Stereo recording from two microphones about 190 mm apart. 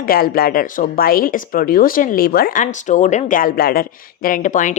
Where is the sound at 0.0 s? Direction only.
50° left (ahead or behind).